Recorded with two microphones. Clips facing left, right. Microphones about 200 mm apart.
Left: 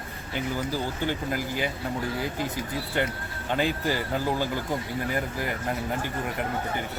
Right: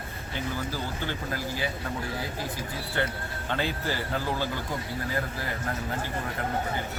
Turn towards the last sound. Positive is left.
turn(degrees=20)  # may be behind; listen again after turning